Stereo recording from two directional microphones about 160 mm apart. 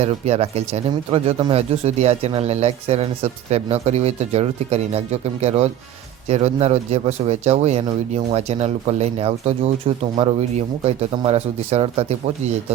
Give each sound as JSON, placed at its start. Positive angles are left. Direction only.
{"t": 0.0, "sound": "speech", "side_deg": -40}